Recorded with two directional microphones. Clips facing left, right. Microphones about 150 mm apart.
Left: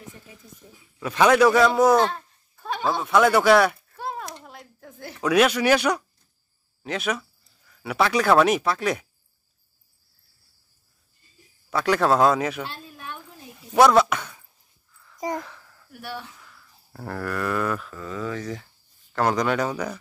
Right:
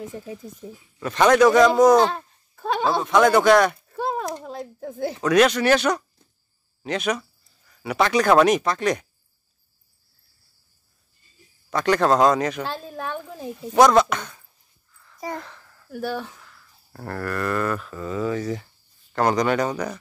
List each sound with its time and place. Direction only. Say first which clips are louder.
0.9 s speech: right 1 dB; 5° left (ahead or behind)
2.1 s babbling: right 4 dB; 80° right
3.0 s speech: right 1 dB; 5° left (ahead or behind)
4.7 s speech: right 13 dB; 35° right (ahead or behind)
5.2 s speech: right 1 dB; 5° left (ahead or behind)
11.7 s speech: right 1 dB; 5° left (ahead or behind)
12.9 s a sound: right 9 dB; 90° right
13.7 s speech: right 1 dB; 5° left (ahead or behind)
15.1 s speech: left 3 dB; 20° left (ahead or behind)
15.4 s a sound: right 1 dB; 5° left (ahead or behind)
17.8 s a sound: right 5 dB; 10° right (ahead or behind)
19.1 s speech: right 2 dB; centre (ahead or behind)